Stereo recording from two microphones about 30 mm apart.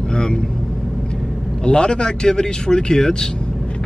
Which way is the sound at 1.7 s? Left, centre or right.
Left.